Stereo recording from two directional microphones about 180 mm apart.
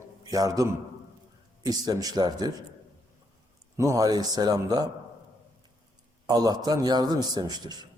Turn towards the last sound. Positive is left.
turn(degrees=-20)  # may be behind; listen again after turning